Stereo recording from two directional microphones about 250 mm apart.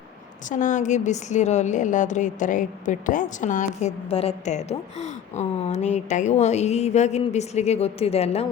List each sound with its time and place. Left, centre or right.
0.4 s a woman's voice: left